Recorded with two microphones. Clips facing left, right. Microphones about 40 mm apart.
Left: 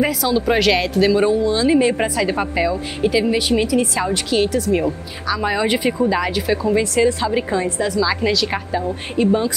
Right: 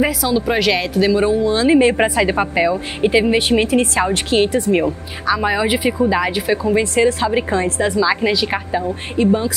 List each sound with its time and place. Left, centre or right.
0.0 s speech: centre; by 4.9 s right
5.3 s speech: centre
8.8 s a woman's voice: centre